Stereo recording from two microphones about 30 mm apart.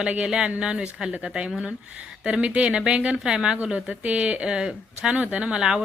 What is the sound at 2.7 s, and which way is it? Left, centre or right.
Speech, right.